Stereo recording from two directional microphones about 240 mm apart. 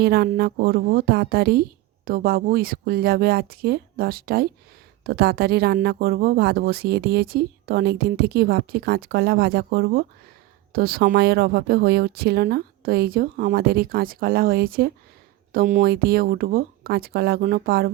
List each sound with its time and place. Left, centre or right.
0.0 s speech: right